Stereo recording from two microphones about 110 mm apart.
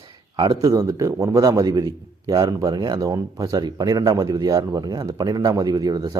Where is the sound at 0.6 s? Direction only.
30° right (ahead or behind).